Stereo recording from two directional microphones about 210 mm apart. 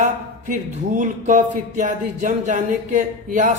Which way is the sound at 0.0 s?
35° right (ahead or behind).